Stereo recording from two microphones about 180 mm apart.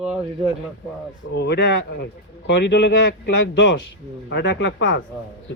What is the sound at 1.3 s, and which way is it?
Speech, 70° left (ahead or behind).